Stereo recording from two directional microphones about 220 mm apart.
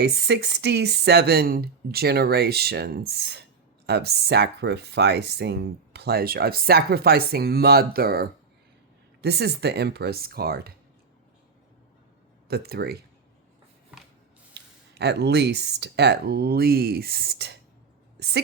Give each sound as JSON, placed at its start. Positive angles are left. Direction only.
{"t": 0.0, "sound": "speech", "side_deg": -50}
{"t": 12.5, "sound": "speech", "side_deg": -45}
{"t": 14.5, "sound": "speech", "side_deg": -50}